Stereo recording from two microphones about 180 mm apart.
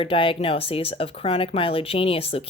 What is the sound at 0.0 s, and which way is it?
Speech, 30° left (ahead or behind).